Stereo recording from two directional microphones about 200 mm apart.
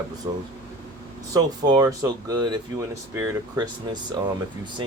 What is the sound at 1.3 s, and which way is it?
Speech, 20° right (ahead or behind).